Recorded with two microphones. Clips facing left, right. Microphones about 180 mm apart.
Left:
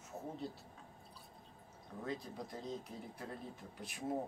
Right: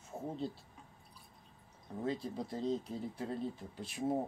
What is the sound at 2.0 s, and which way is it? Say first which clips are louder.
Speech: right 6 dB; 30° right (ahead or behind).